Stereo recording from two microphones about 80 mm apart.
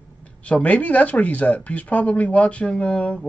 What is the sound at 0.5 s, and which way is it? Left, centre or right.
Speech, centre.